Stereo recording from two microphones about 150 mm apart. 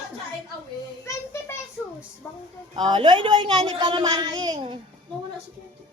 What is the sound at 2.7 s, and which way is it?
A woman's voice, 30° right (ahead or behind).